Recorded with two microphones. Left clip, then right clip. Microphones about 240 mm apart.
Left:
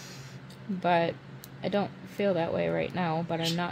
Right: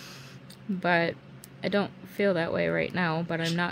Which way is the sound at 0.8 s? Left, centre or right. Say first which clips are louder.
Even; right.